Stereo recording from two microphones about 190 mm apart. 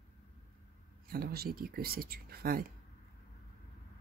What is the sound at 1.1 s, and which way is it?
Speech, 50° right (ahead or behind).